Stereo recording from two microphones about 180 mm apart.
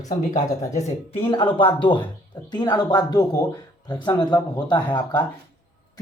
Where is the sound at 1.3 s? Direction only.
25° left (ahead or behind).